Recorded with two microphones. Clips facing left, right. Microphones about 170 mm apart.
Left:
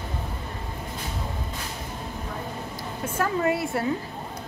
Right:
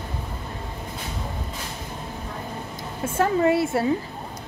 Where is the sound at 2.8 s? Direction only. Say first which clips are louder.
Right 4 dB; 25° right (ahead or behind).